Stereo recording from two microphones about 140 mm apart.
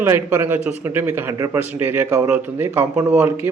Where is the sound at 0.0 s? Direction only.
20° right (ahead or behind).